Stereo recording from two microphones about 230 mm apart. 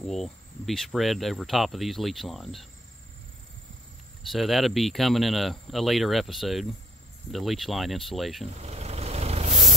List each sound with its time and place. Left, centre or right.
0.0 s speech: centre
4.3 s speech: centre
8.5 s vehicle: right